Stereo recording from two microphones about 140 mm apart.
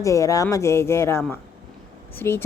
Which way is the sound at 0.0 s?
20° left (ahead or behind).